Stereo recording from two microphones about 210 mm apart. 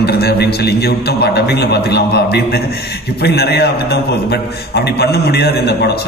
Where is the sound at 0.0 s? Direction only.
50° left (ahead or behind).